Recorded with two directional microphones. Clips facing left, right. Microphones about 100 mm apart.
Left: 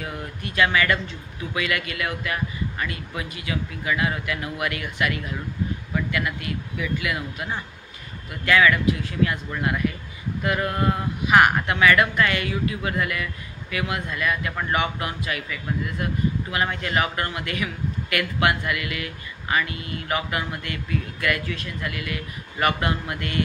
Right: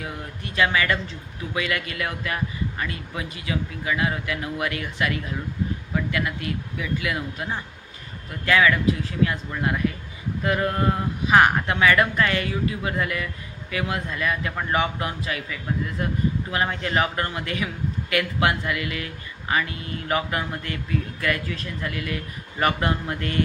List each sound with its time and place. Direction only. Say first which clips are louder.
0.4 s a woman's voice: left 1 dB; 30° right (ahead or behind)
10.4 s a woman's voice: right 1 dB; 30° right (ahead or behind)